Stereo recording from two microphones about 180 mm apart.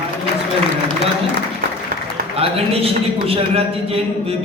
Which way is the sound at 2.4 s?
30° right (ahead or behind).